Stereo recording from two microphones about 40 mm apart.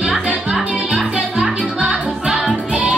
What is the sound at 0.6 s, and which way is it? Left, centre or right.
Music, right.